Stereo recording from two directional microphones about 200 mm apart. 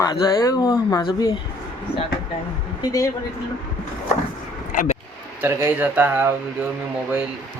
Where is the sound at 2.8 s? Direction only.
15° left (ahead or behind).